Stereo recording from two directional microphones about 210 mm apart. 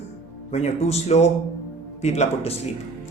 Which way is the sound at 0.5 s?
30° left (ahead or behind).